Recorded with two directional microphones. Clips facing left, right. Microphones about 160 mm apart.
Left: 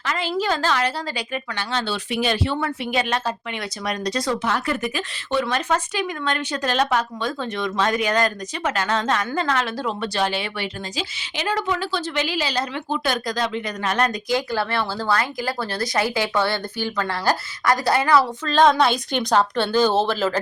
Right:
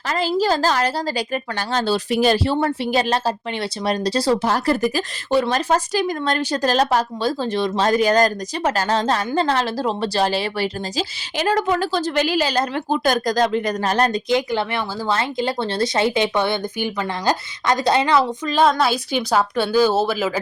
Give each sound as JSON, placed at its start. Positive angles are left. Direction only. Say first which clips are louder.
{"t": 0.0, "sound": "a woman's voice", "louder": "right 4 dB", "side_deg": -40}
{"t": 14.3, "sound": "speech", "louder": "right 3 dB", "side_deg": -20}